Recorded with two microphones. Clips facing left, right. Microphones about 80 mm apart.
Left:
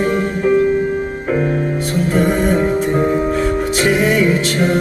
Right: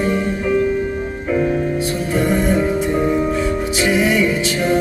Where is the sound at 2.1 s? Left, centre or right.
Left.